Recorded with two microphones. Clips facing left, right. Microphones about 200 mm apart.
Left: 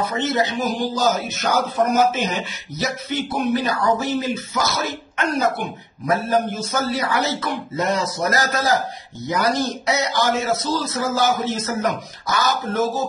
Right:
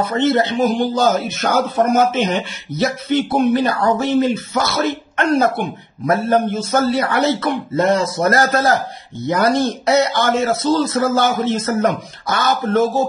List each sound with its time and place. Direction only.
0.1 s speech: 55° right (ahead or behind)